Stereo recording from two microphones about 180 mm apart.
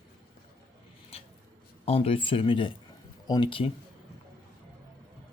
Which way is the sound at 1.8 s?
35° left (ahead or behind).